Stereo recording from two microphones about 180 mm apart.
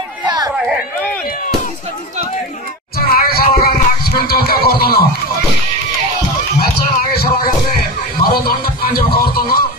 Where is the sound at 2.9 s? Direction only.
55° left (ahead or behind).